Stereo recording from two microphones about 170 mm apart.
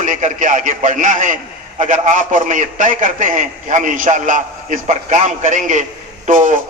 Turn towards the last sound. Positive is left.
turn(degrees=-50)  # may be behind; listen again after turning